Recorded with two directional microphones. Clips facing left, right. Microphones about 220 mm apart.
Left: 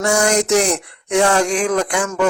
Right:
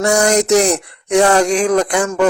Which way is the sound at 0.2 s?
35° right (ahead or behind).